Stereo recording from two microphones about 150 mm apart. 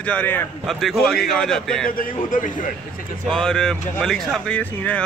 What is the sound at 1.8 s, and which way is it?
Speech, 65° left (ahead or behind).